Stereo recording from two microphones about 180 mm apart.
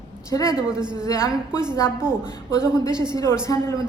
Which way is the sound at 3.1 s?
15° left (ahead or behind).